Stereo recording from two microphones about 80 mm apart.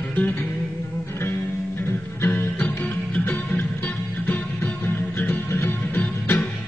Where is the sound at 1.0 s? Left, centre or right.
Left.